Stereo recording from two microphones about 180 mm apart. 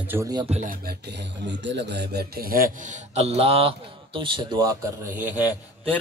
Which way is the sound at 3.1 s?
35° right (ahead or behind).